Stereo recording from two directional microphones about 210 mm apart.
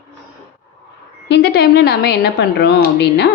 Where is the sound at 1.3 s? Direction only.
55° left (ahead or behind).